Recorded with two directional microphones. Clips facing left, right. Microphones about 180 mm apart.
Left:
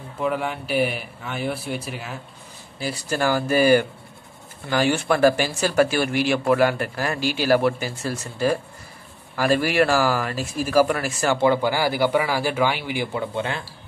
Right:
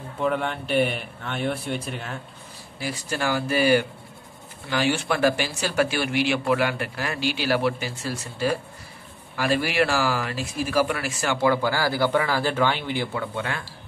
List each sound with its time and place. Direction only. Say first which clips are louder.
0.2 s speech: even; 5° left (ahead or behind)
2.8 s speech: left 4 dB; 40° left (ahead or behind)
11.4 s speech: left 1 dB; 20° left (ahead or behind)